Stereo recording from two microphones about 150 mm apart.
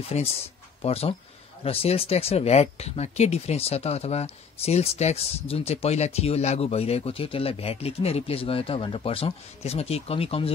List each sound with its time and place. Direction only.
0.1 s speech: 45° left (ahead or behind)